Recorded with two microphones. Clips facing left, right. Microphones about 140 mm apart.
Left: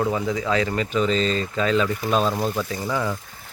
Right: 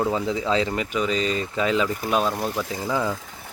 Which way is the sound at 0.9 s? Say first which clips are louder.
Left 3 dB; 10° right (ahead or behind).